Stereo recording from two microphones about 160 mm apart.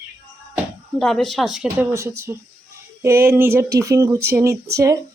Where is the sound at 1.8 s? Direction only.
15° right (ahead or behind).